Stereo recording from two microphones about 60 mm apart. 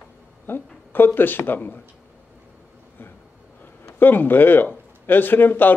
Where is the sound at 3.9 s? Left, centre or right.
Left.